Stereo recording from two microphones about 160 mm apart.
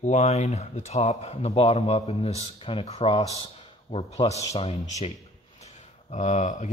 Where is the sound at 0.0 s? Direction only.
45° left (ahead or behind).